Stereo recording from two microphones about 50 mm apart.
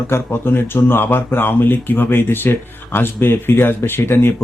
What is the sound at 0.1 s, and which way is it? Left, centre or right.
A man's voice, left.